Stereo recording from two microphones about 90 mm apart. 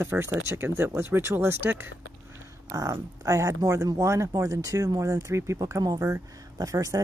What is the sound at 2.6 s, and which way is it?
Speech, 40° right (ahead or behind).